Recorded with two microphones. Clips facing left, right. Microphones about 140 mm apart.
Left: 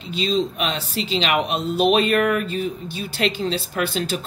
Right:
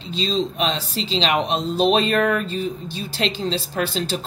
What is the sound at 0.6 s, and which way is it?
Speech, 35° right (ahead or behind).